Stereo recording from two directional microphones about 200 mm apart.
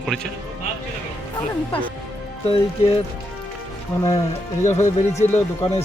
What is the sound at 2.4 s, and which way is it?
Speech, 30° left (ahead or behind).